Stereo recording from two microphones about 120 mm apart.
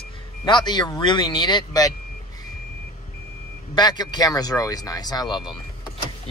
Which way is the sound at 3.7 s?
35° left (ahead or behind).